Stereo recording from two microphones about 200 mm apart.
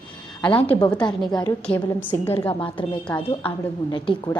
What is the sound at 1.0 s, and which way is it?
A woman's voice, 20° left (ahead or behind).